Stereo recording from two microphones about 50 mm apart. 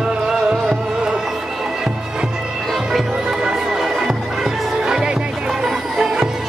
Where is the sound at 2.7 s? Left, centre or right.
Centre.